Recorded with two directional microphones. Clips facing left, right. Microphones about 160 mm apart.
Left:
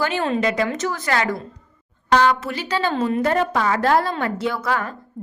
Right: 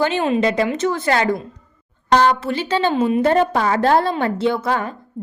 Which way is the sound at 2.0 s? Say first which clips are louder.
Right 2 dB; 40° right (ahead or behind).